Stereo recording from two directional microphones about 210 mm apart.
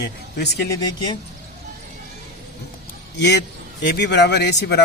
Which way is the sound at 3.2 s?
55° left (ahead or behind).